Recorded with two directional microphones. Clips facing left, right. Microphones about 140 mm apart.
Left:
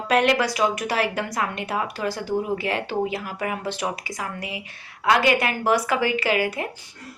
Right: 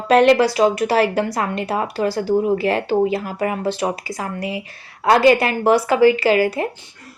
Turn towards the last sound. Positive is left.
turn(degrees=-30)  # may be behind; listen again after turning